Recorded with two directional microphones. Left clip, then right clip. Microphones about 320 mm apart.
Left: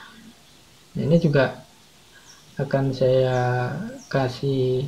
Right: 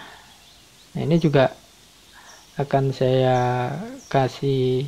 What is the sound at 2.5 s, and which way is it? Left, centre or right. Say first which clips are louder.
Speech: right 2 dB; right.